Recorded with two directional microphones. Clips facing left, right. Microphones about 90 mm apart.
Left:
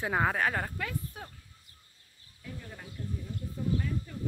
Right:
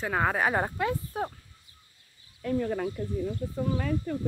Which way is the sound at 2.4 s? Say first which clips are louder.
Right 17 dB; 65° right (ahead or behind).